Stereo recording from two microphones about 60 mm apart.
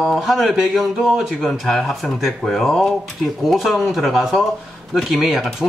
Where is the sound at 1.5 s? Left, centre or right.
Centre.